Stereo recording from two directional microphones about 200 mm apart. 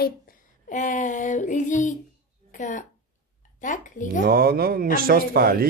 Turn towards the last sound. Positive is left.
turn(degrees=-50)  # may be behind; listen again after turning